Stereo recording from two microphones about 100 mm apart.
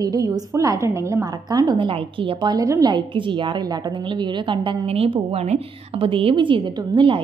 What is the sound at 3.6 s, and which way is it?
A woman's voice, 45° right (ahead or behind).